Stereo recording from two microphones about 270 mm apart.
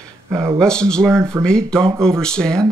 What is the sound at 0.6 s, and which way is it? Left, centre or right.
Speech, centre.